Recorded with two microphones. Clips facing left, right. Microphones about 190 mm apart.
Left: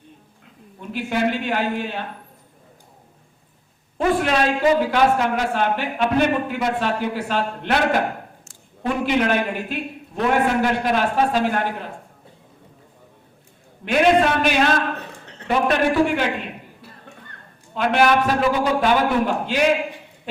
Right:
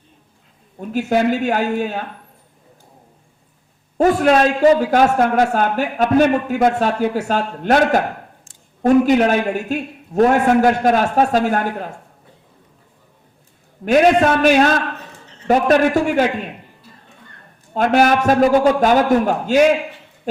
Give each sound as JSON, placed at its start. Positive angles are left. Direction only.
{"t": 0.8, "sound": "a man's voice", "side_deg": -40}
{"t": 3.9, "sound": "a man's voice", "side_deg": -45}
{"t": 13.8, "sound": "a man's voice", "side_deg": -40}
{"t": 14.9, "sound": "a sound", "side_deg": 65}
{"t": 15.4, "sound": "a man's voice", "side_deg": -40}
{"t": 17.7, "sound": "a man's voice", "side_deg": -45}